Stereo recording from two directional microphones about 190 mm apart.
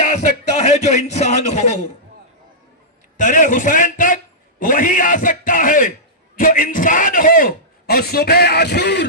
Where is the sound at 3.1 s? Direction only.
40° left (ahead or behind).